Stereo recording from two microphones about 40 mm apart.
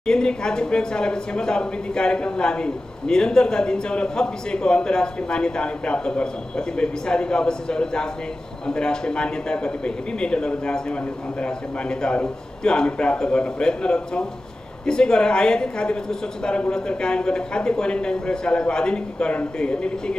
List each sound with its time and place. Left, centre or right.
0.0 s a woman's voice: centre